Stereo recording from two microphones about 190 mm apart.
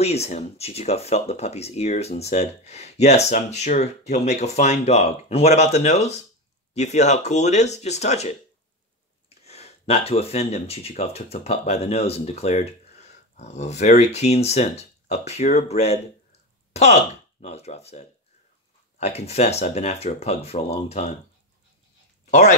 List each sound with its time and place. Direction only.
0.0 s speech: 35° left (ahead or behind)
9.4 s speech: 35° left (ahead or behind)
22.2 s a sound: 35° left (ahead or behind)